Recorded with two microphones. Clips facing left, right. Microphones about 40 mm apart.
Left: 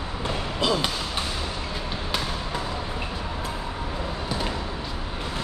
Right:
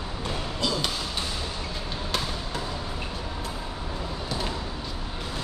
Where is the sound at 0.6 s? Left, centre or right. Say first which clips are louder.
Left 4 dB; left.